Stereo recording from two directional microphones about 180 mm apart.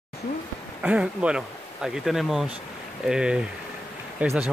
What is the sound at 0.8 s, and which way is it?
Speech, 5° right (ahead or behind).